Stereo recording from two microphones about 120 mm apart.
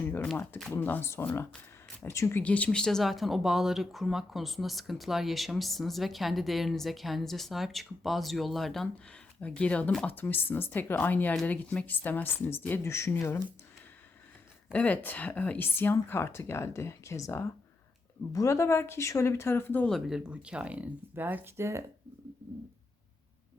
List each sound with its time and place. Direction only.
0.0 s a sound: 15° left (ahead or behind)
0.7 s speech: 15° left (ahead or behind)
2.4 s speech: 10° left (ahead or behind)
14.7 s speech: 15° left (ahead or behind)
19.9 s speech: 5° right (ahead or behind); by 21.8 s 25° right (ahead or behind)